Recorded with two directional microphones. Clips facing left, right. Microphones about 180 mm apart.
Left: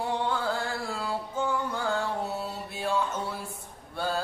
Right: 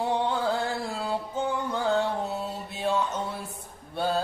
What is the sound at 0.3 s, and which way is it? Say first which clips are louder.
Chant: right 3 dB; 20° right (ahead or behind).